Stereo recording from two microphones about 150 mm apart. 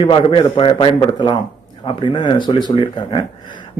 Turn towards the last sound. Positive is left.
turn(degrees=30)  # may be behind; listen again after turning